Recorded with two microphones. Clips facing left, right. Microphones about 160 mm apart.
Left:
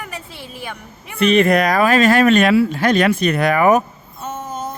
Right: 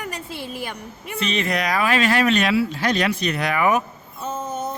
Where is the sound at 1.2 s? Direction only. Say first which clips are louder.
Left 10 dB; 60° left (ahead or behind).